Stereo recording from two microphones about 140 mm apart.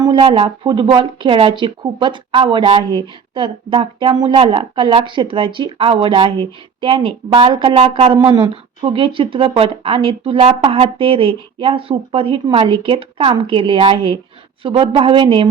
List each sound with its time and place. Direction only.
0.0 s speech: 35° right (ahead or behind)